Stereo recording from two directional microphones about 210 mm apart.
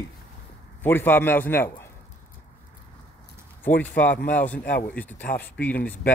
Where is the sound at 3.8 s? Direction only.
5° left (ahead or behind).